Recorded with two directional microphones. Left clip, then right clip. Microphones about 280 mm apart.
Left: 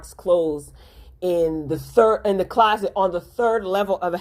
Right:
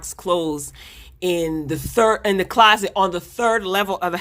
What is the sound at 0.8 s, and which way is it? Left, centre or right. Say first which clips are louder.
Speech: right 1 dB; right.